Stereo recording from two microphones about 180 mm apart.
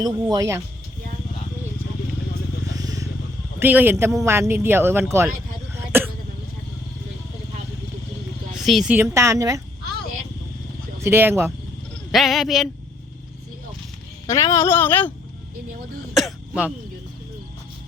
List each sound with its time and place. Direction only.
0.0 s speech: 20° right (ahead or behind)
2.7 s vehicle: 20° right (ahead or behind)
3.6 s speech: 10° right (ahead or behind)
8.5 s speech: centre (ahead or behind); by 9.6 s 15° right (ahead or behind)
11.0 s speech: 10° right (ahead or behind)
12.1 s speech: centre (ahead or behind)
14.3 s speech: 15° left (ahead or behind)
16.1 s throat clearing: 5° right (ahead or behind)